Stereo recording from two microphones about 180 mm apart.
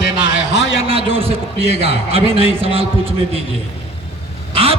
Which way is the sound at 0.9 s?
30° right (ahead or behind).